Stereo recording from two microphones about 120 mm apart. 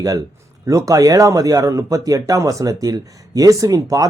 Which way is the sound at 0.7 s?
30° right (ahead or behind).